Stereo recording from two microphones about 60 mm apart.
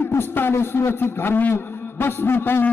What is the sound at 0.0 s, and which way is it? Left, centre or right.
A man's voice, left.